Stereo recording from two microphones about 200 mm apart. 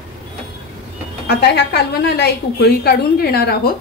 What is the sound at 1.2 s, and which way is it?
A woman's voice, 55° left (ahead or behind).